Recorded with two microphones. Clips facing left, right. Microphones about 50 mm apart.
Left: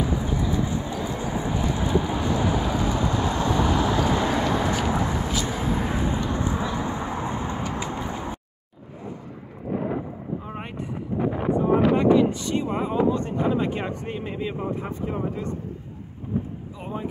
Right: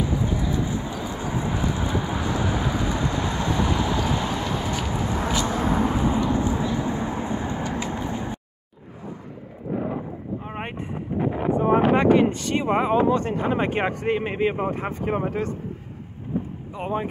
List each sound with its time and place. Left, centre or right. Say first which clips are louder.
0.0 s a sound: even; centre
5.7 s vehicle: right 4 dB; centre
9.8 s a sound: even; centre
10.4 s boat: right 2 dB; right
11.1 s wind noise: right 1 dB; centre
12.1 s a sound: right 1 dB; right
13.4 s speech: right 1 dB; right
14.0 s speech: right 7 dB; right
16.7 s speech: right 6 dB; right